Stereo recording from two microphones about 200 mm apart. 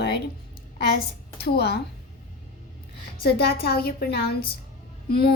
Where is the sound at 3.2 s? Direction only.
50° left (ahead or behind).